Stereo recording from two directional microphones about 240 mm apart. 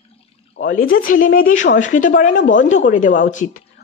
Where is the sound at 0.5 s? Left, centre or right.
Left.